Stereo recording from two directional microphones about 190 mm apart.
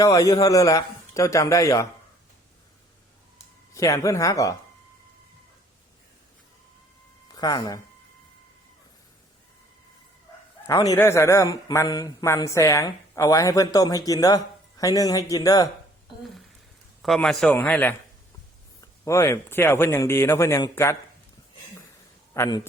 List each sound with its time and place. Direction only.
0.0 s speech: 20° left (ahead or behind)
3.8 s speech: 15° left (ahead or behind)
7.3 s speech: 20° left (ahead or behind)
10.8 s speech: 15° left (ahead or behind)
17.0 s speech: centre (ahead or behind)
22.4 s speech: 20° left (ahead or behind)